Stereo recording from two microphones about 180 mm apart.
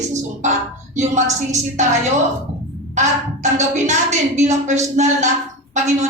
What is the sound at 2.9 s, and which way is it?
A woman's voice, 40° right (ahead or behind).